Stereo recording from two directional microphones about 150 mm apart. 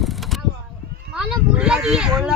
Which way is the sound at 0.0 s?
Centre (ahead or behind).